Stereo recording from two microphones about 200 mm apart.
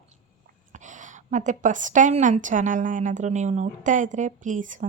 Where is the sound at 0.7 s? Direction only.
40° right (ahead or behind).